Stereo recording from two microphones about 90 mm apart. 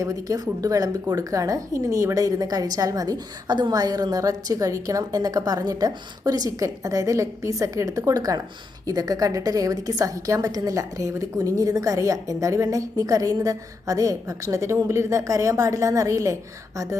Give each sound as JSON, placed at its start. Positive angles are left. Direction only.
{"t": 0.0, "sound": "a woman's voice", "side_deg": -40}